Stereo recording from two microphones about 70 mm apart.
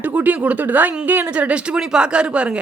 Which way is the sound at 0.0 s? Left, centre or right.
Right.